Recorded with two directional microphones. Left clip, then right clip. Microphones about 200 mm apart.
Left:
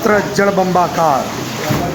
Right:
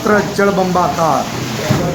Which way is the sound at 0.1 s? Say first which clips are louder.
Right 3 dB; 30° left (ahead or behind).